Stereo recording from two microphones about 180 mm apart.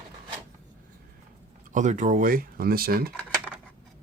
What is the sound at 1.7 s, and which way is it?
Speech, 40° right (ahead or behind).